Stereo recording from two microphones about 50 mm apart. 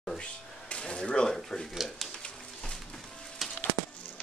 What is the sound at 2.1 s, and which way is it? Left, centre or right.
Music, centre.